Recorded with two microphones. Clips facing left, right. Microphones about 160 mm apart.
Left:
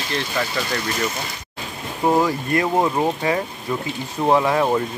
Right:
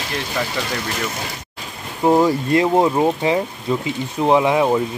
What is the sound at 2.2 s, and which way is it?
Speech, 20° right (ahead or behind).